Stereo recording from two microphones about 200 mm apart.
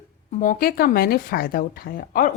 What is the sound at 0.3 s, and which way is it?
A woman's voice, 40° left (ahead or behind).